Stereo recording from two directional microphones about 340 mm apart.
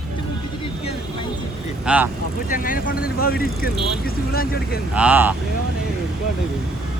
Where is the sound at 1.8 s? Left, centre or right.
Centre.